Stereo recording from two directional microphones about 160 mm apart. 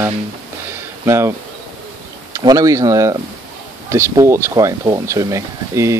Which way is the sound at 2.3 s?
20° right (ahead or behind).